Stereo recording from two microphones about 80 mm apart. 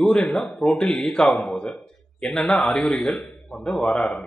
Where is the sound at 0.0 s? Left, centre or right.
Centre.